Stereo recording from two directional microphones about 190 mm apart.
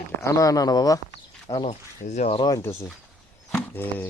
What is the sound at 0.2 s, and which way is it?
Speech, 15° left (ahead or behind).